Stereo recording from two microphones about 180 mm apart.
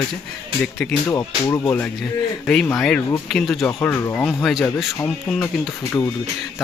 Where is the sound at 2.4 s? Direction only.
5° left (ahead or behind).